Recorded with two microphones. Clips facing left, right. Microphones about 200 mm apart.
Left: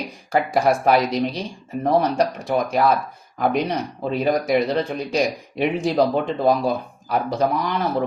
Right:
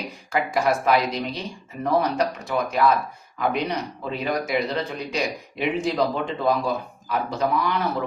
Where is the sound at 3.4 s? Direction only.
40° left (ahead or behind).